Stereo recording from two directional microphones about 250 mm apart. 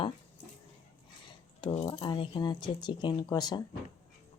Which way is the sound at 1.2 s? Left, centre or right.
Centre.